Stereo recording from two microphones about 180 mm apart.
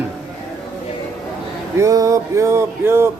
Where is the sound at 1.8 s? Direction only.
15° right (ahead or behind).